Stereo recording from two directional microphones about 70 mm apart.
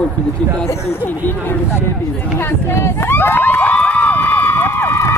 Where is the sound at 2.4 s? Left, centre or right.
Left.